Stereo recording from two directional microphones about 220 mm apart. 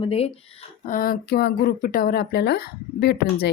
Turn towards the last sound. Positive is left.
turn(degrees=45)  # may be behind; listen again after turning